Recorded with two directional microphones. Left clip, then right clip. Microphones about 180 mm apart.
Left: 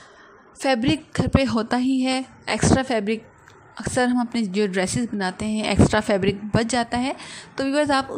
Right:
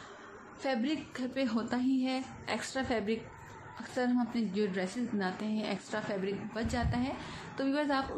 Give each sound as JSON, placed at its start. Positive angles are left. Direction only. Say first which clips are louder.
{"t": 0.6, "sound": "a woman's voice", "louder": "left 13 dB", "side_deg": 40}